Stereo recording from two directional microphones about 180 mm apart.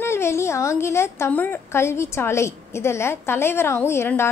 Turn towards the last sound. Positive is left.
turn(degrees=15)  # may be behind; listen again after turning